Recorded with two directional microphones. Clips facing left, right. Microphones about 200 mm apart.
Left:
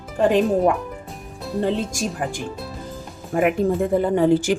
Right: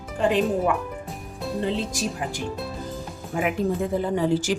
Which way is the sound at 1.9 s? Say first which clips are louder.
Left 3 dB; 50° left (ahead or behind).